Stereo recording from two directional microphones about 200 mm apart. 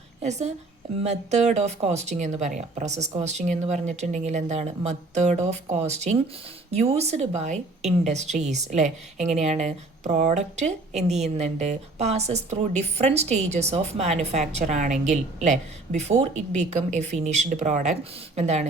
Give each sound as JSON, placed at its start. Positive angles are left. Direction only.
{"t": 0.2, "sound": "a woman's voice", "side_deg": -35}